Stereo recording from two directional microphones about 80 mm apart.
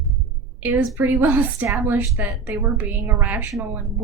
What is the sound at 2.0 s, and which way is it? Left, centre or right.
Speech, right.